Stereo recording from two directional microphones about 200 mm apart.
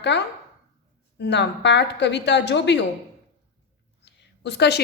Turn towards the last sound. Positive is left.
turn(degrees=60)  # may be behind; listen again after turning